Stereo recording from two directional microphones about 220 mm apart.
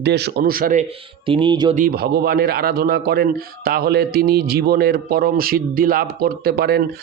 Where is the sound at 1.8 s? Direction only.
45° right (ahead or behind).